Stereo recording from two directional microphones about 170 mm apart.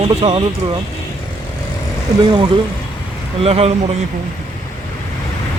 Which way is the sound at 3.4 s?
35° right (ahead or behind).